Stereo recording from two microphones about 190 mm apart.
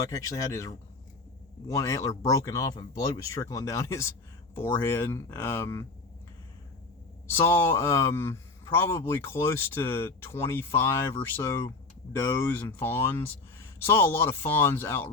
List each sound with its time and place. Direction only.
0.1 s speech: 15° left (ahead or behind)
7.4 s speech: 15° left (ahead or behind)